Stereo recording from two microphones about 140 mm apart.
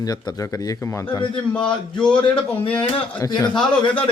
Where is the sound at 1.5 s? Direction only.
5° left (ahead or behind).